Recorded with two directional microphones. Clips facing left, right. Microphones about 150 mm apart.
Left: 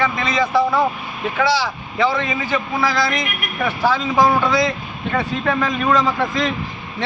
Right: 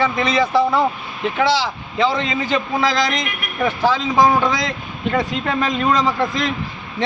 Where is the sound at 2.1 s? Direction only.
20° right (ahead or behind).